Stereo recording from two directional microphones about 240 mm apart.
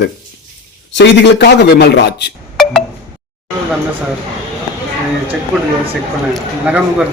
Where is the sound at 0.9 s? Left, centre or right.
Left.